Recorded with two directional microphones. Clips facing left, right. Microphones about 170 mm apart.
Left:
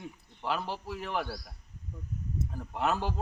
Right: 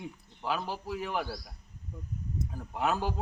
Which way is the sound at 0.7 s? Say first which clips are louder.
Right 1 dB; 5° right (ahead or behind).